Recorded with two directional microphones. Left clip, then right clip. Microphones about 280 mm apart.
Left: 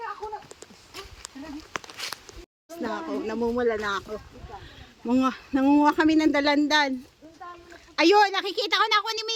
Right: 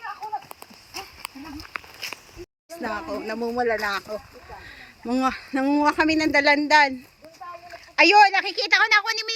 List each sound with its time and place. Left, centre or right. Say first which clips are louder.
0.2 s a sound: right 4 dB; right
2.6 s speech: right 2 dB; centre
5.0 s speech: right 1 dB; centre
7.9 s speech: right 5 dB; centre